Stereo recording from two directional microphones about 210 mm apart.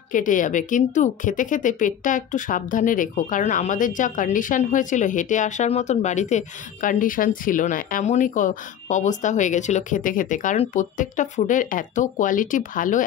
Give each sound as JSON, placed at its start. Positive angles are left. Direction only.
{"t": 0.1, "sound": "a woman's voice", "side_deg": 40}